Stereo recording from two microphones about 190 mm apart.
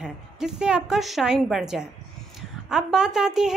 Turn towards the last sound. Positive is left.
turn(degrees=-5)  # may be behind; listen again after turning